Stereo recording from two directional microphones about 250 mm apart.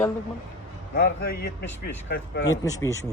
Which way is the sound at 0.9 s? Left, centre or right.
Left.